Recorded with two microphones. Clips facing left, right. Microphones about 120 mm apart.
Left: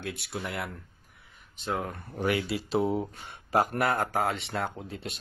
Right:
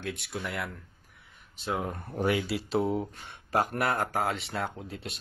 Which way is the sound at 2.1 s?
25° right (ahead or behind).